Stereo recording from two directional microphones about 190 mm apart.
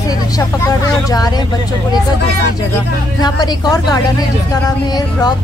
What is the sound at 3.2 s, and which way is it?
Speech, 20° left (ahead or behind).